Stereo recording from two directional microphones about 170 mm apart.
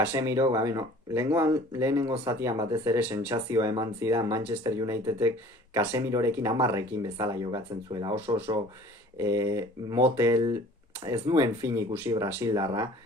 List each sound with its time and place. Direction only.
0.0 s speech: 15° right (ahead or behind)